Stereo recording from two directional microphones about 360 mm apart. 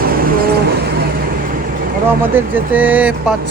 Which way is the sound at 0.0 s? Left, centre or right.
Right.